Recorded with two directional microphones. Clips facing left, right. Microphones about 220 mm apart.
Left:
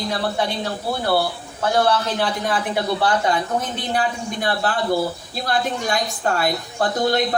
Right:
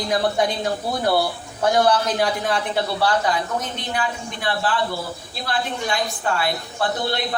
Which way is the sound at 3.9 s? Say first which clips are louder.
Left 4 dB; 45° left (ahead or behind).